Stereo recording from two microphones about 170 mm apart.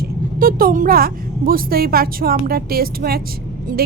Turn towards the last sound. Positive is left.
turn(degrees=-60)  # may be behind; listen again after turning